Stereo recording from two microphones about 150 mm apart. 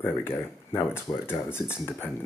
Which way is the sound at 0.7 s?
15° left (ahead or behind).